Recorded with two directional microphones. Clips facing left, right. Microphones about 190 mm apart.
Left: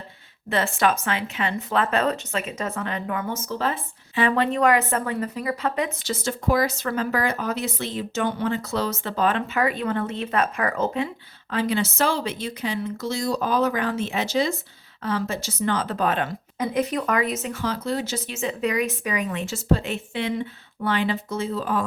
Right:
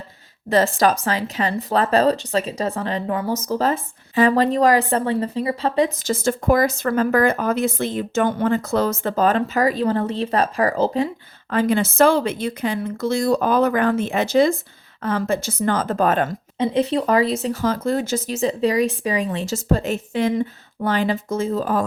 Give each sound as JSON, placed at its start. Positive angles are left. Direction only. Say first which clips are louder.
{"t": 0.5, "sound": "speech", "louder": "right 5 dB", "side_deg": -40}
{"t": 6.1, "sound": "speech", "louder": "right 5 dB", "side_deg": -50}
{"t": 11.5, "sound": "speech", "louder": "right 6 dB", "side_deg": -50}
{"t": 16.6, "sound": "speech", "louder": "right 5 dB", "side_deg": -30}